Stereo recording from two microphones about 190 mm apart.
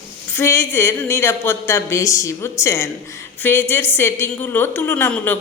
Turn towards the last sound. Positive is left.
turn(degrees=10)  # may be behind; listen again after turning